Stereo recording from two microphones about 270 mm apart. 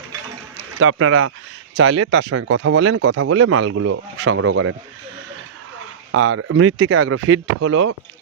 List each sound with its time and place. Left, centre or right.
0.5 s speech: right
6.1 s speech: right